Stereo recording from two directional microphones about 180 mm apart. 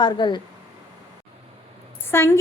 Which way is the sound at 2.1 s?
15° left (ahead or behind).